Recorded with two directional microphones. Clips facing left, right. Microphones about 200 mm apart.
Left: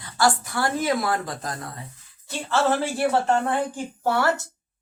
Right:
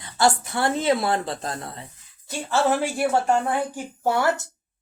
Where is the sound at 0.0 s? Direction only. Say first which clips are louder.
Right 1 dB; 25° right (ahead or behind).